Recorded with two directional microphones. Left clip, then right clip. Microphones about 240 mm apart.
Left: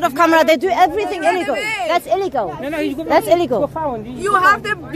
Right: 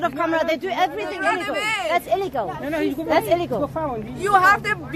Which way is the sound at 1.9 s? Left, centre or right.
Left.